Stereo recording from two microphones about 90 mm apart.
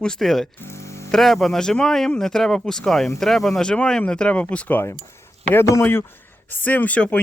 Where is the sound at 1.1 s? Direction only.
5° left (ahead or behind); by 4.9 s 20° left (ahead or behind).